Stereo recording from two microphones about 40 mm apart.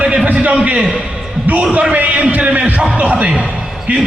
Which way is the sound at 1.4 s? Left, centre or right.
Right.